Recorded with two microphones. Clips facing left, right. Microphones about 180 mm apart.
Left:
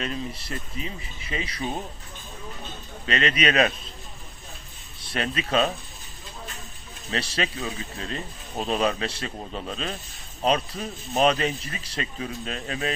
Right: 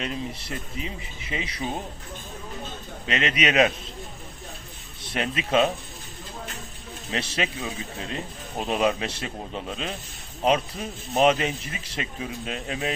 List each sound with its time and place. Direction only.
0.0 s speech: 20° right (ahead or behind)
3.1 s speech: 15° right (ahead or behind)
5.1 s speech: 15° right (ahead or behind)
7.1 s speech: 15° right (ahead or behind)